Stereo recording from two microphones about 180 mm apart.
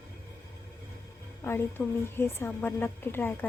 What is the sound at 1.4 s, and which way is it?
A woman's voice, 15° left (ahead or behind).